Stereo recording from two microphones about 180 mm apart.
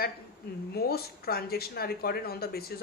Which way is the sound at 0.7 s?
60° left (ahead or behind).